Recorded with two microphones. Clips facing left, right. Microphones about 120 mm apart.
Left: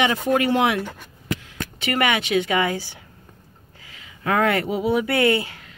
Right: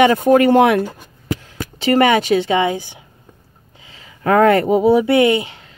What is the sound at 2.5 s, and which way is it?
Speech, 25° right (ahead or behind).